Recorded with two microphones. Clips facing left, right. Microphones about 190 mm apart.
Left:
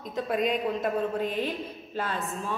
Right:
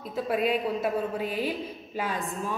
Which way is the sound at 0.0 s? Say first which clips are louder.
Right 1 dB; 5° right (ahead or behind).